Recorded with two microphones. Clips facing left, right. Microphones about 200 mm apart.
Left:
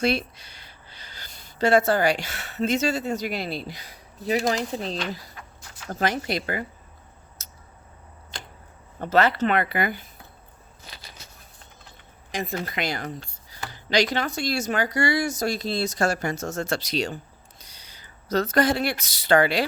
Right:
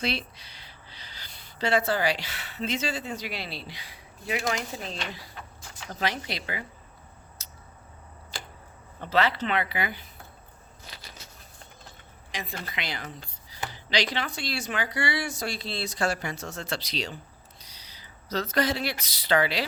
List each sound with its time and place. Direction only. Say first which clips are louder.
0.0 s speech: left 7 dB; 50° left (ahead or behind)
5.9 s speech: left 6 dB; 50° left (ahead or behind)
7.4 s a sound: even; 45° left (ahead or behind)
9.0 s speech: left 5 dB; 45° left (ahead or behind)
12.3 s speech: left 7 dB; 45° left (ahead or behind)